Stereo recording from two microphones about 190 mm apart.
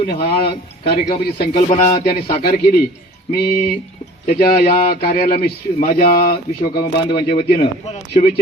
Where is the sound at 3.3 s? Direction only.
55° left (ahead or behind).